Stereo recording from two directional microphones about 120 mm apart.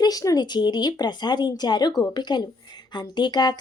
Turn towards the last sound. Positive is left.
turn(degrees=35)  # may be behind; listen again after turning